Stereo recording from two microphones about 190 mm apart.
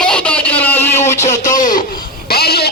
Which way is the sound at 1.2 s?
40° left (ahead or behind).